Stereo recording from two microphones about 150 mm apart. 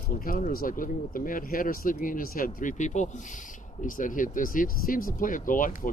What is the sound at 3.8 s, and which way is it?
Speech, 65° left (ahead or behind).